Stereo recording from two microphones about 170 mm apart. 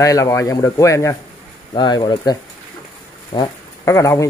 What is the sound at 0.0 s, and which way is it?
Speech, 20° left (ahead or behind).